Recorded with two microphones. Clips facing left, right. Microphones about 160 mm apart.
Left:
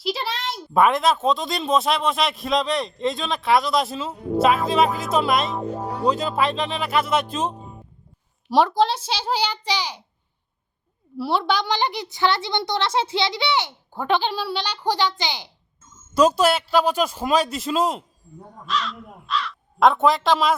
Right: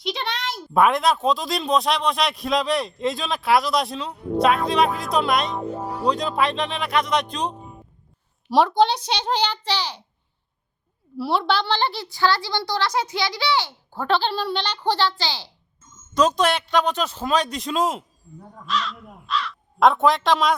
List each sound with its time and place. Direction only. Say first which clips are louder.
0.0 s speech: left 1 dB; 5° left (ahead or behind)
5.7 s music: left 1 dB; 10° right (ahead or behind)
6.1 s speech: even; 5° left (ahead or behind)
11.2 s speech: even; centre (ahead or behind)
11.5 s a child's voice: even; 15° left (ahead or behind)